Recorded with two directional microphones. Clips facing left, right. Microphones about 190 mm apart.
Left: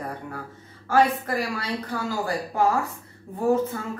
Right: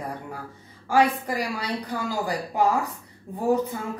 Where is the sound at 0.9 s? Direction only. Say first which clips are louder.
Even; 15° right (ahead or behind).